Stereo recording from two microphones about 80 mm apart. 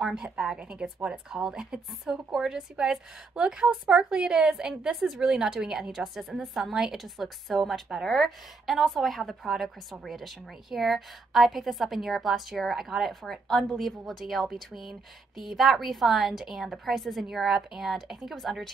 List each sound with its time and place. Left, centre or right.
0.0 s speech: centre